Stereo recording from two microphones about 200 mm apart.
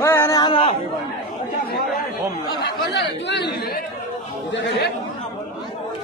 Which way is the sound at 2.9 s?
60° left (ahead or behind).